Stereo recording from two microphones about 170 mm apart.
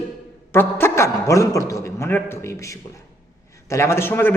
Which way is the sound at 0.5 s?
15° left (ahead or behind).